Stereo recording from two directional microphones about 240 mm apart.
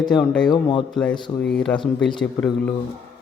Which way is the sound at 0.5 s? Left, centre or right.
Centre.